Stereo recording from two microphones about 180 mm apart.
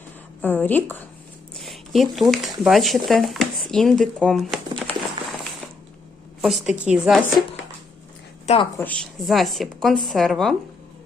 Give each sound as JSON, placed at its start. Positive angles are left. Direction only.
{"t": 0.4, "sound": "a woman's voice", "side_deg": 10}
{"t": 1.5, "sound": "speech", "side_deg": 0}
{"t": 6.4, "sound": "speech", "side_deg": 0}
{"t": 8.5, "sound": "a woman's voice", "side_deg": 35}
{"t": 8.8, "sound": "speech", "side_deg": 5}